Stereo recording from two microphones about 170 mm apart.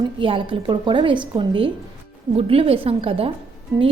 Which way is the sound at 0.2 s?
30° right (ahead or behind).